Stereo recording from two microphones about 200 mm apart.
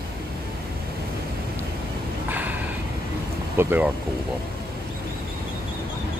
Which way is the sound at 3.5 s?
10° right (ahead or behind).